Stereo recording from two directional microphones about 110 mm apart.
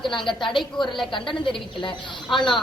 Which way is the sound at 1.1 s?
50° left (ahead or behind).